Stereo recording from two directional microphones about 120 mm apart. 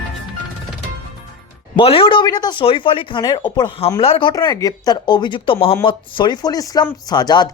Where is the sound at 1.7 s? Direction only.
45° left (ahead or behind).